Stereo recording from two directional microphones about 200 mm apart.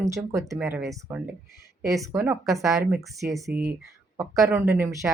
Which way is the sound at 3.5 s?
50° right (ahead or behind).